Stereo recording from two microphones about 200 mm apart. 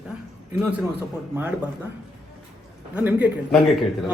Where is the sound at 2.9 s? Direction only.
10° right (ahead or behind).